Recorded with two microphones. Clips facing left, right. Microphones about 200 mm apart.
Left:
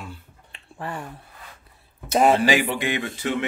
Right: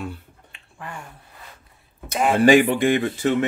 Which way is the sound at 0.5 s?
35° left (ahead or behind).